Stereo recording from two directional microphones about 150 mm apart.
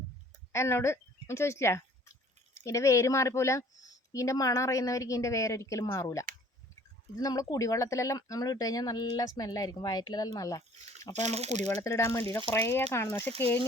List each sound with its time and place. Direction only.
0.5 s speech: 15° left (ahead or behind)
11.1 s speech: 50° right (ahead or behind)
11.6 s speech: 20° left (ahead or behind)